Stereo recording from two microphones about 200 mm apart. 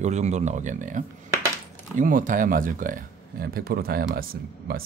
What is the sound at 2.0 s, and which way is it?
Speech, 40° right (ahead or behind).